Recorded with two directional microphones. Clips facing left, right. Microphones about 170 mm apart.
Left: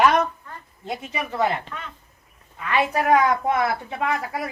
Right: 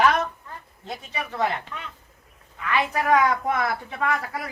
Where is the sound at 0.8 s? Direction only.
20° left (ahead or behind).